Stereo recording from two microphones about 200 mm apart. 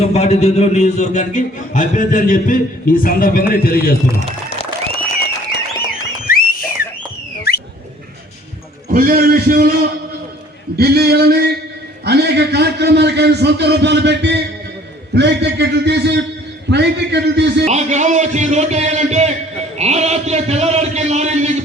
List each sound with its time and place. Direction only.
0.0 s a man's voice: 30° left (ahead or behind); by 3.9 s 50° left (ahead or behind)
6.2 s a sound: 45° left (ahead or behind)
8.9 s a man's voice: 50° right (ahead or behind)
17.7 s a man's voice: 35° right (ahead or behind)